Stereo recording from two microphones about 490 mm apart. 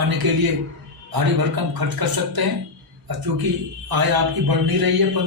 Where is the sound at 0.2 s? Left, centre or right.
Right.